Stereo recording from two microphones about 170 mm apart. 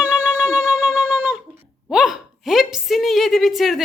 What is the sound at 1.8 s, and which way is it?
A woman's voice, centre (ahead or behind).